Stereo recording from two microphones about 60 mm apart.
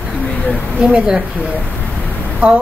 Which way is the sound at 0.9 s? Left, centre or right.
Centre.